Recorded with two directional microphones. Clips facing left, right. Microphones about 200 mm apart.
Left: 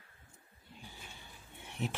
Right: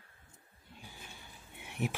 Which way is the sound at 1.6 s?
15° right (ahead or behind).